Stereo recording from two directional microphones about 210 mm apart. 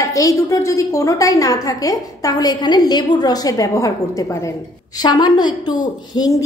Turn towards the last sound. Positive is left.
turn(degrees=20)  # may be behind; listen again after turning